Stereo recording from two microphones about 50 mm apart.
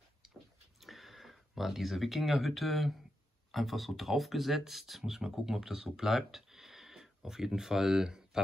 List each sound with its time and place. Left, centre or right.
0.7 s speech: centre